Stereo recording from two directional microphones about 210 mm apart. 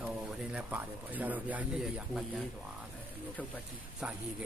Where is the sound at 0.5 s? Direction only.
10° right (ahead or behind).